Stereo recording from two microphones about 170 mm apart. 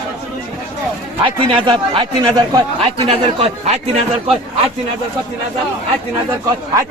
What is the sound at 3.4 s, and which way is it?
Speech, 40° right (ahead or behind).